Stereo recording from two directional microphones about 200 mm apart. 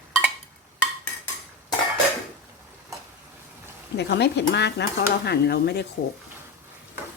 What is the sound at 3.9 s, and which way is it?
Speech, 60° left (ahead or behind).